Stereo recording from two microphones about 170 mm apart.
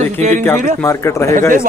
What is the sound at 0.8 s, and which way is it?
Speech, 15° left (ahead or behind).